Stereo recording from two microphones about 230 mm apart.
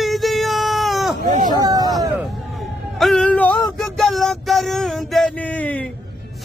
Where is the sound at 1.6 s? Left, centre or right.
Centre.